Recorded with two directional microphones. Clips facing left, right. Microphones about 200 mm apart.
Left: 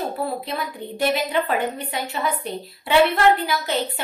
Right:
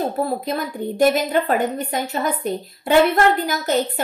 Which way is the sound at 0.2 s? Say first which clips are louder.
Right 4 dB; 45° right (ahead or behind).